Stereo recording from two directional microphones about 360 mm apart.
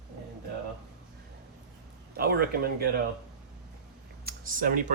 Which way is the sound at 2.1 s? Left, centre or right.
Right.